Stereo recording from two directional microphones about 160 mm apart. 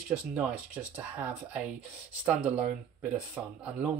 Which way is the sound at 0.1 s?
10° right (ahead or behind).